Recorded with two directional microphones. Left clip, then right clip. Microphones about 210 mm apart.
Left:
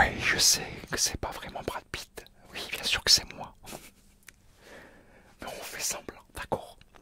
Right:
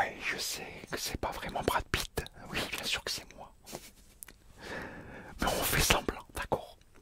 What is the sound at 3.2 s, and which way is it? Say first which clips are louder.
Whispering: left 8 dB; 50° left (ahead or behind).